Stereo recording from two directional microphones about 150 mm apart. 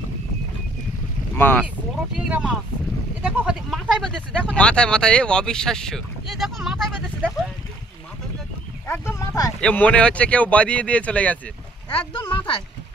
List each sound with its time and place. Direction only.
1.3 s speech: 10° left (ahead or behind)
2.1 s speech: 5° right (ahead or behind)
4.1 s speech: 5° left (ahead or behind)
8.8 s speech: 15° left (ahead or behind)
9.6 s speech: 10° left (ahead or behind)
11.9 s speech: 35° left (ahead or behind)